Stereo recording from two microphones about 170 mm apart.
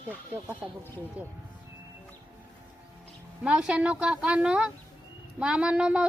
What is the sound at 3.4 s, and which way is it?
A woman's voice, 5° right (ahead or behind).